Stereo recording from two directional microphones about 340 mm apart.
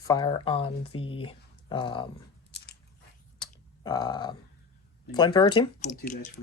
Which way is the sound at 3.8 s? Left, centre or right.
Centre.